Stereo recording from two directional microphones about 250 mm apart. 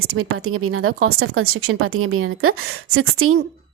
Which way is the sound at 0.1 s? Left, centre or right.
Right.